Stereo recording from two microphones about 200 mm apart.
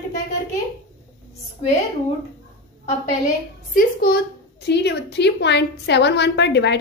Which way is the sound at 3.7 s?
50° left (ahead or behind).